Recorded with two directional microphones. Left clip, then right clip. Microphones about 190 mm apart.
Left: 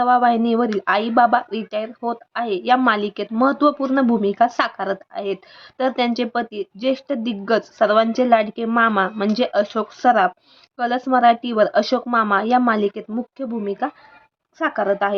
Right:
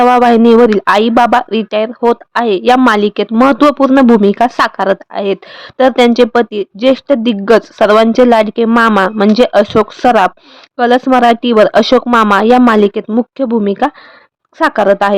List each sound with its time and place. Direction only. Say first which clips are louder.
0.0 s speech: right 9 dB; 40° right (ahead or behind)